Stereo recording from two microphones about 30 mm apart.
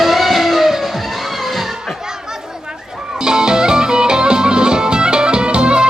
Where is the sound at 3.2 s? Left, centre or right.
Right.